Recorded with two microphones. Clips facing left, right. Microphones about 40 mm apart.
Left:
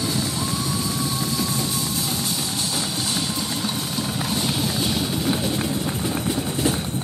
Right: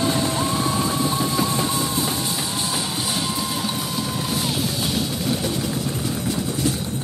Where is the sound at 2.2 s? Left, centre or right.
Centre.